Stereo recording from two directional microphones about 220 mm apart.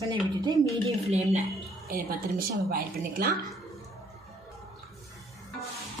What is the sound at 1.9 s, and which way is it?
A woman's voice, 40° right (ahead or behind).